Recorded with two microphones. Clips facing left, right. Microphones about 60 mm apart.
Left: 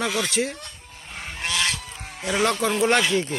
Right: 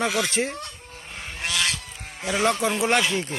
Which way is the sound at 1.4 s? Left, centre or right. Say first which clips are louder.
Left 1 dB; centre.